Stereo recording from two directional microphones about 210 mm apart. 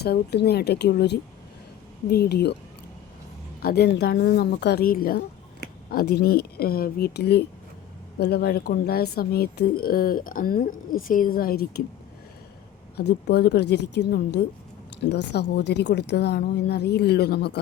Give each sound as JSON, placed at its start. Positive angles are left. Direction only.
{"t": 0.0, "sound": "speech", "side_deg": 50}
{"t": 3.6, "sound": "speech", "side_deg": 45}
{"t": 13.0, "sound": "speech", "side_deg": 50}
{"t": 15.3, "sound": "speech", "side_deg": 55}